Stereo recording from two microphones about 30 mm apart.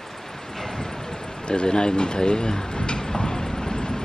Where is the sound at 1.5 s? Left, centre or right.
Left.